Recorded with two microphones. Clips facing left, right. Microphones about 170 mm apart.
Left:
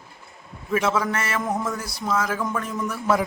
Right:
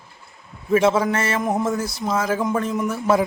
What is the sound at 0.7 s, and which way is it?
A man's voice, 30° right (ahead or behind).